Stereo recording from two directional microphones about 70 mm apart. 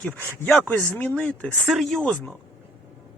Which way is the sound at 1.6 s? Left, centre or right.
Centre.